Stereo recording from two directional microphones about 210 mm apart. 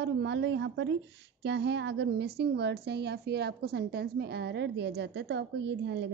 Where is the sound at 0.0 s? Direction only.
60° right (ahead or behind).